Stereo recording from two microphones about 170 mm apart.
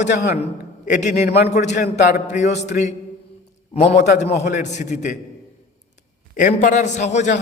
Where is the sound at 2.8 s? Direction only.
55° left (ahead or behind).